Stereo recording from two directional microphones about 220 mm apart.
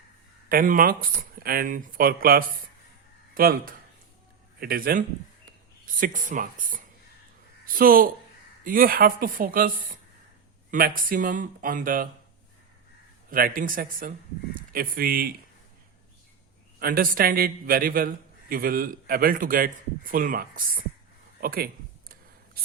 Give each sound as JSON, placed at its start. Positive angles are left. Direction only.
{"t": 0.4, "sound": "a man's voice", "side_deg": -40}
{"t": 13.3, "sound": "a man's voice", "side_deg": -40}
{"t": 16.8, "sound": "a man's voice", "side_deg": -40}